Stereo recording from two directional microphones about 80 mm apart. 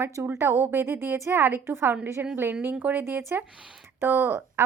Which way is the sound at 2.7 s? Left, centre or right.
Centre.